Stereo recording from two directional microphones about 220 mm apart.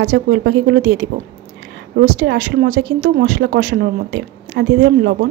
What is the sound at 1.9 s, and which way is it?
A woman's voice, 45° right (ahead or behind).